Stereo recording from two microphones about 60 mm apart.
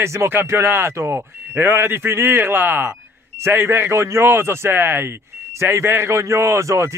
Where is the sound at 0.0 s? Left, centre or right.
Right.